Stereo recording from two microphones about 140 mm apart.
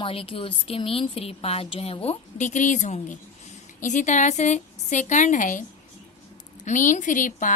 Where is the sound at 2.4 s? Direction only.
60° left (ahead or behind).